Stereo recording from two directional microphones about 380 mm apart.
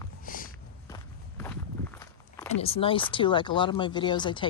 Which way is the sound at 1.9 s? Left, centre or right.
Centre.